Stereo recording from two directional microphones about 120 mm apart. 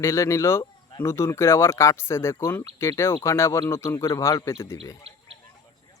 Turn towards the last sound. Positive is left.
turn(degrees=-55)  # may be behind; listen again after turning